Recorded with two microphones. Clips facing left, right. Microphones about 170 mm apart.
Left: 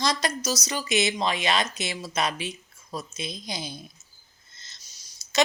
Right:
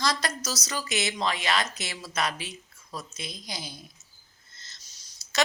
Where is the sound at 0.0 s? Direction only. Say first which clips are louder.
Left 3 dB; 20° left (ahead or behind).